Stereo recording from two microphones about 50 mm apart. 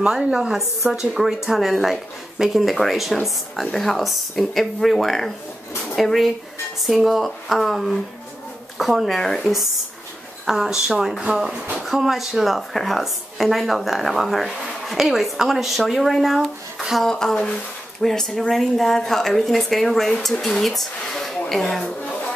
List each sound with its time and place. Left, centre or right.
0.0 s a woman's voice: centre
10.4 s a woman's voice: centre
16.4 s speech: centre
17.1 s a woman's voice: centre
21.8 s a sound: centre